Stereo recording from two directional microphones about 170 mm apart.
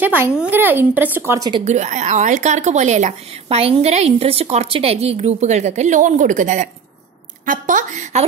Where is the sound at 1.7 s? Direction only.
45° right (ahead or behind).